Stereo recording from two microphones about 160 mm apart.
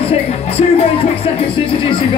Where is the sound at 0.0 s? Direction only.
40° left (ahead or behind).